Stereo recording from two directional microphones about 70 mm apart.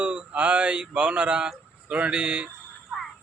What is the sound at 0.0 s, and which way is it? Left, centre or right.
A man's voice, centre.